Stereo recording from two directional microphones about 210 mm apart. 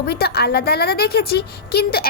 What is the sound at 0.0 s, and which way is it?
A woman's voice, 50° left (ahead or behind).